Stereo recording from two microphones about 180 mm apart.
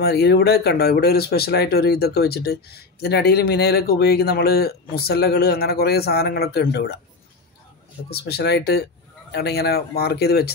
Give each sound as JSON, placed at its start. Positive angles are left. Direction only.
{"t": 0.0, "sound": "speech", "side_deg": 65}
{"t": 8.1, "sound": "speech", "side_deg": 65}